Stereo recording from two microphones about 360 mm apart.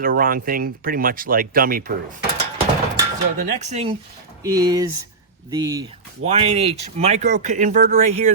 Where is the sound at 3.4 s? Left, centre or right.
Centre.